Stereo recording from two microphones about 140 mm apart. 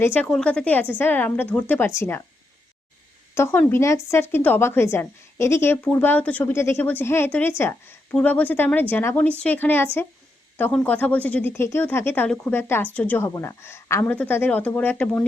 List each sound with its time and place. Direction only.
0.0 s speech: 10° left (ahead or behind)
3.3 s speech: 20° left (ahead or behind)